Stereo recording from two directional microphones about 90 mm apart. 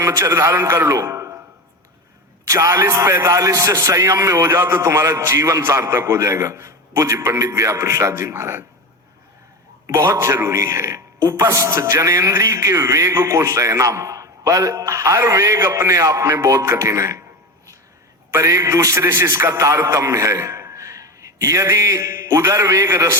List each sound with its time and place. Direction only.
0.0 s a man's voice: 35° right (ahead or behind)
2.5 s a man's voice: 35° right (ahead or behind)
9.8 s a man's voice: 35° right (ahead or behind)
18.3 s a man's voice: 35° right (ahead or behind)